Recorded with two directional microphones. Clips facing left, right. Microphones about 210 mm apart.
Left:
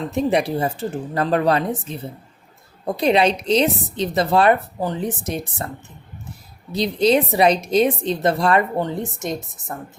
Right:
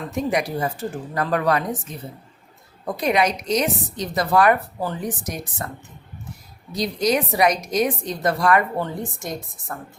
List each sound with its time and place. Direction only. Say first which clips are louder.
0.1 s a woman's voice: left 3 dB; 30° left (ahead or behind)
6.7 s a woman's voice: left 4 dB; 25° left (ahead or behind)